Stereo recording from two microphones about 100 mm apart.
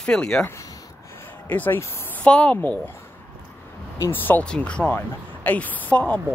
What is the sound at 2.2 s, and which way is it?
Speech, 10° left (ahead or behind).